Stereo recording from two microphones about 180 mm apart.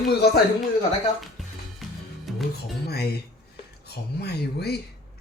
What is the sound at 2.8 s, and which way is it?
Speech, 60° left (ahead or behind).